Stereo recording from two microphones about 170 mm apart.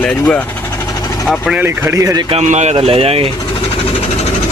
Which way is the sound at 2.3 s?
40° right (ahead or behind).